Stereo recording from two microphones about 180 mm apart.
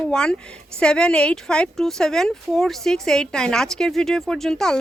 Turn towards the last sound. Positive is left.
turn(degrees=5)  # may be behind; listen again after turning